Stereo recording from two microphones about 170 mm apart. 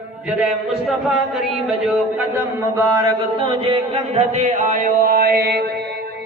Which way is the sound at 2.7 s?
25° right (ahead or behind).